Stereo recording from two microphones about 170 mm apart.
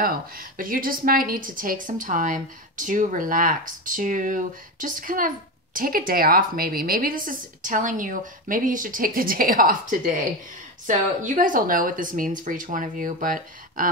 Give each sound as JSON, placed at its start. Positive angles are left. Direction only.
{"t": 0.0, "sound": "a woman's voice", "side_deg": -55}